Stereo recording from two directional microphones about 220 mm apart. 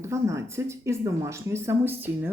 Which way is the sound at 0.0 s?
15° right (ahead or behind).